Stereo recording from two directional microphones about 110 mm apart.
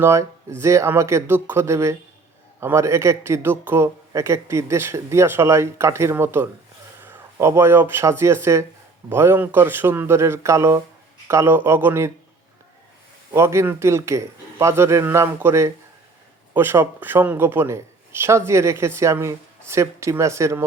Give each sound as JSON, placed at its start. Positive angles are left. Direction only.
{"t": 0.0, "sound": "a man's voice", "side_deg": -25}
{"t": 13.3, "sound": "a man's voice", "side_deg": -25}